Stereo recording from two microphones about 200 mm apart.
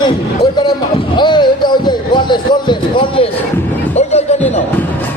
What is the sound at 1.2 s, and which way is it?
Speech, 20° left (ahead or behind).